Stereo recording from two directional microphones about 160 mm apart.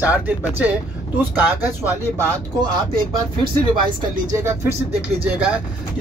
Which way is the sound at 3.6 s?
30° right (ahead or behind).